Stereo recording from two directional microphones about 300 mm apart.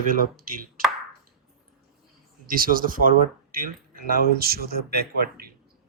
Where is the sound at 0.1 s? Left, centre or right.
Right.